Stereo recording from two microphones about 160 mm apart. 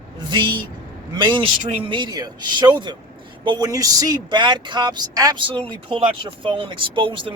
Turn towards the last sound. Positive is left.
turn(degrees=-30)  # may be behind; listen again after turning